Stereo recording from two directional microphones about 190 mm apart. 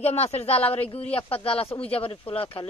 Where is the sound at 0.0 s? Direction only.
35° left (ahead or behind).